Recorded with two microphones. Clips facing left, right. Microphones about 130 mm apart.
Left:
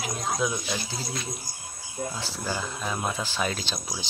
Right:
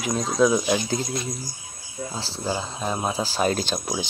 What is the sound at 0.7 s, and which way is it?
Speech, 45° right (ahead or behind).